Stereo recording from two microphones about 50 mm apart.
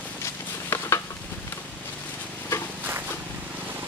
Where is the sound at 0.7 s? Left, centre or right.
Left.